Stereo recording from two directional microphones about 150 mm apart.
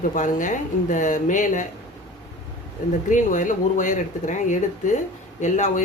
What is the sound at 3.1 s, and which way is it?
Speech, 55° left (ahead or behind).